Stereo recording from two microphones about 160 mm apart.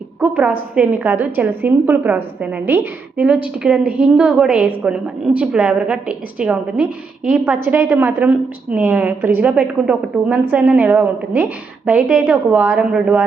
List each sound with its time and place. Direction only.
0.2 s a woman's voice: 10° right (ahead or behind)